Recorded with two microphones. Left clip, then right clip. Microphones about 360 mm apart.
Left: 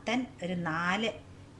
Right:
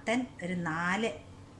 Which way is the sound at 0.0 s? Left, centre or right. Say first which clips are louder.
Right 1 dB; centre.